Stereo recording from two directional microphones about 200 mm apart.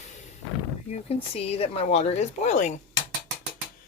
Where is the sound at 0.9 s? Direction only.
30° left (ahead or behind).